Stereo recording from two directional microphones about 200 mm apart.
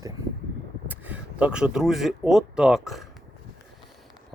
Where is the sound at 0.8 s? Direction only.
5° right (ahead or behind).